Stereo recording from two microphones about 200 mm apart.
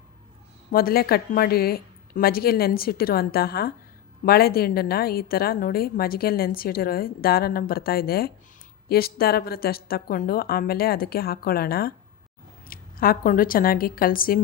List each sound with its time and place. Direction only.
0.7 s a woman's voice: 50° left (ahead or behind)